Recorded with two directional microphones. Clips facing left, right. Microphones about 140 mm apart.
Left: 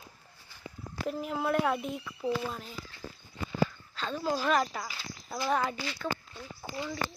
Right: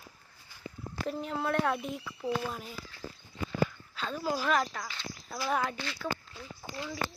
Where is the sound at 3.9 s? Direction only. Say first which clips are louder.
Left 1 dB; 5° right (ahead or behind).